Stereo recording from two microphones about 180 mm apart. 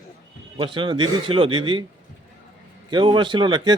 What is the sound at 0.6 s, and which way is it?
A man's voice, 25° right (ahead or behind).